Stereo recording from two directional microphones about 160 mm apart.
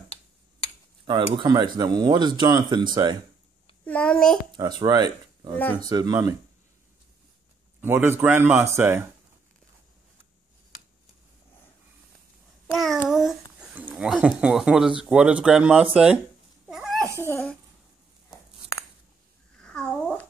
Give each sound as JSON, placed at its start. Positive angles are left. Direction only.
{"t": 1.0, "sound": "speech", "side_deg": -30}
{"t": 3.8, "sound": "a child's voice", "side_deg": 5}
{"t": 4.5, "sound": "speech", "side_deg": -25}
{"t": 7.8, "sound": "speech", "side_deg": -15}
{"t": 13.1, "sound": "speech", "side_deg": 0}
{"t": 16.6, "sound": "a sound", "side_deg": -5}
{"t": 19.6, "sound": "a sound", "side_deg": 5}